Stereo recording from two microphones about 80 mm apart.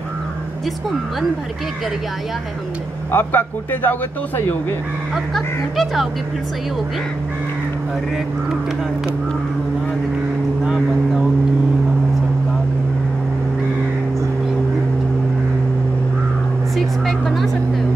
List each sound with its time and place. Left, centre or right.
3.1 s a man's voice: left
5.1 s speech: centre
10.6 s vehicle: centre
16.7 s vehicle: centre